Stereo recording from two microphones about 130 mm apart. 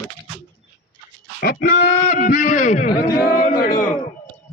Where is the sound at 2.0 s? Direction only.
90° left; by 2.9 s 70° left (ahead or behind).